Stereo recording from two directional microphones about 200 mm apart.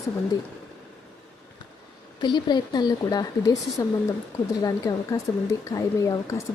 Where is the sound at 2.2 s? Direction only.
20° left (ahead or behind).